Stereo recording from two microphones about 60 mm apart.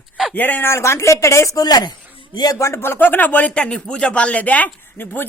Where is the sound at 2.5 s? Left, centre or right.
Left.